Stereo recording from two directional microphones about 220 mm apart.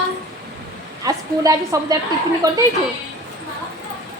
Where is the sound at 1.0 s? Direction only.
15° right (ahead or behind).